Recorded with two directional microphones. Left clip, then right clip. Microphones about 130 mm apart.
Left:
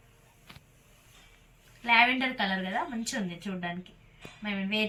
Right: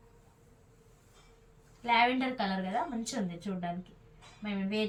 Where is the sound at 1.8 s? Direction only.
15° right (ahead or behind).